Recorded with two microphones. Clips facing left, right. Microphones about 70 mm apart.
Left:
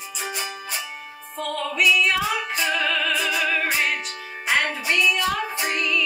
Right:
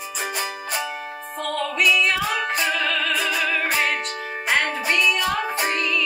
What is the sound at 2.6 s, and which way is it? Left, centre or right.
Opera, centre.